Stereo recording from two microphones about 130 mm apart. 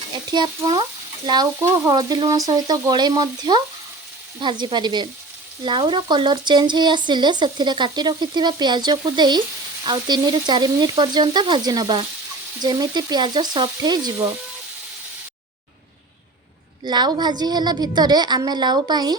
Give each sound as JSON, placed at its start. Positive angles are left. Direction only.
{"t": 0.3, "sound": "speech", "side_deg": -30}
{"t": 16.8, "sound": "speech", "side_deg": -35}